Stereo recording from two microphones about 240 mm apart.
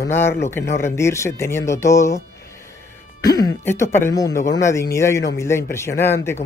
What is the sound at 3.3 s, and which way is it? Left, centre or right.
Speech, centre.